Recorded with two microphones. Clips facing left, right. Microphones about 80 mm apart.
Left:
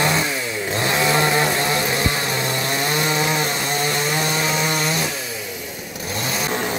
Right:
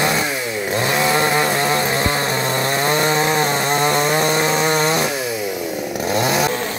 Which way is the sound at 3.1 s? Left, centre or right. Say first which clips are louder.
Right 4 dB; right.